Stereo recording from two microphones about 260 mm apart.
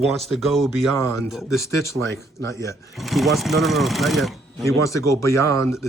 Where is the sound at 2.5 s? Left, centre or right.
Centre.